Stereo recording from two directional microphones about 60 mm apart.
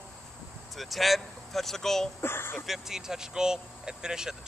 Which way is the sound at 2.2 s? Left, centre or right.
Left.